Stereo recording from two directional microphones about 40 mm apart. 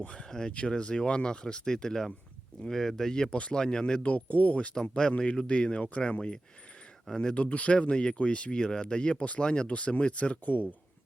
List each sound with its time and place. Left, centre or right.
0.1 s speech: centre
3.3 s speech: left
3.6 s speech: centre
4.0 s speech: left
4.7 s speech: centre
7.1 s speech: centre
7.7 s speech: left